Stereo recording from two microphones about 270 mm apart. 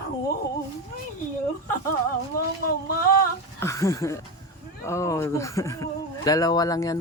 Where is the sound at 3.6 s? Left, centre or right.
Centre.